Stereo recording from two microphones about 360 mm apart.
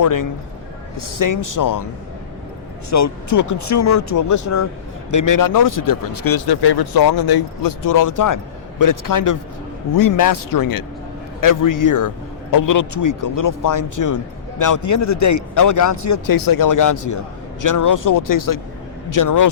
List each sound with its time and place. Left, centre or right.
0.0 s a man's voice: left
2.9 s a man's voice: left